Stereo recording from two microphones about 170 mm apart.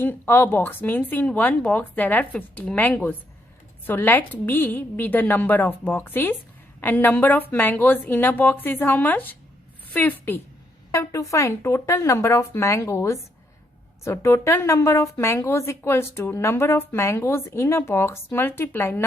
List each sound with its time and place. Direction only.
0.0 s a woman's voice: 10° left (ahead or behind)